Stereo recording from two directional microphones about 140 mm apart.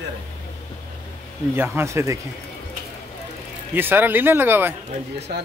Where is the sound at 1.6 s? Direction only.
20° right (ahead or behind).